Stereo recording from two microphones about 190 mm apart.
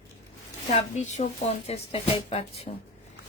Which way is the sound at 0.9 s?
35° left (ahead or behind).